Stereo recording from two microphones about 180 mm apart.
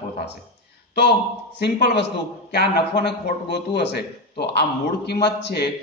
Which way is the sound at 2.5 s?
65° left (ahead or behind).